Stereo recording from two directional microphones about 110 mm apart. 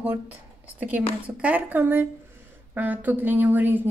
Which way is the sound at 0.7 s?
15° right (ahead or behind).